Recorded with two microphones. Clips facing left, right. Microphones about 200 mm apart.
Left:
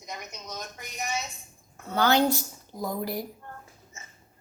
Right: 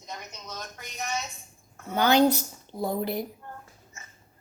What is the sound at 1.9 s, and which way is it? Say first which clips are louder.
Speech: right 2 dB; 15° right (ahead or behind).